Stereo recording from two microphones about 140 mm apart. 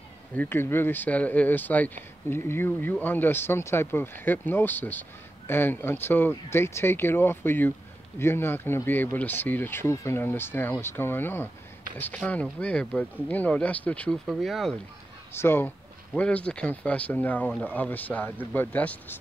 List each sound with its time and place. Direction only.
0.4 s speech: 15° left (ahead or behind)
14.2 s speech: centre (ahead or behind)
15.3 s speech: 15° left (ahead or behind)